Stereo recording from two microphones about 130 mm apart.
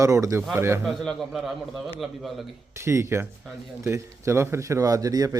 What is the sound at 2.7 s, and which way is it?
Speech, 20° right (ahead or behind).